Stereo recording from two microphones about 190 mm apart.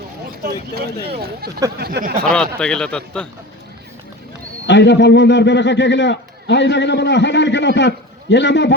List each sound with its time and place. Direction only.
0.4 s speech: 55° right (ahead or behind)
2.2 s a man's voice: 5° left (ahead or behind)
4.6 s a man's voice: 65° left (ahead or behind)